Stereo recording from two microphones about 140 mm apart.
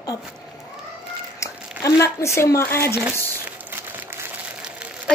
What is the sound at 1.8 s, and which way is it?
Speech, 20° left (ahead or behind).